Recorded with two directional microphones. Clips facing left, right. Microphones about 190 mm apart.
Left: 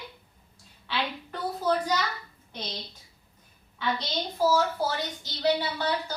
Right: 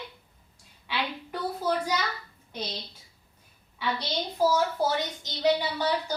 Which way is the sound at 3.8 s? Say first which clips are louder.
Even; 10° right (ahead or behind).